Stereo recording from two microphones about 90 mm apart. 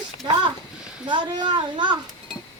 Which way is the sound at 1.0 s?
60° right (ahead or behind).